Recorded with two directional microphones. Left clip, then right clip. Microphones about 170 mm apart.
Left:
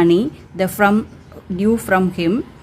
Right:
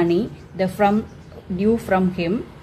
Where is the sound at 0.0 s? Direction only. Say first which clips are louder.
Left 5 dB; 35° left (ahead or behind).